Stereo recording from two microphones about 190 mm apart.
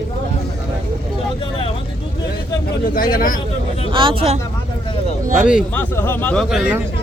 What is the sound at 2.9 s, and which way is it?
Speech, 50° left (ahead or behind).